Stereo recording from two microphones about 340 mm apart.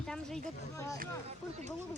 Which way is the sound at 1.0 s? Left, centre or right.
Right.